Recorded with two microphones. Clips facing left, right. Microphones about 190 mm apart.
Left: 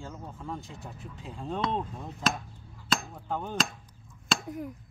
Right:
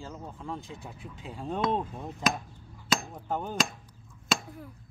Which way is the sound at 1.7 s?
15° right (ahead or behind).